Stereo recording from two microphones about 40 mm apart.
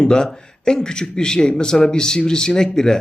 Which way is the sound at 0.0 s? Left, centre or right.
Centre.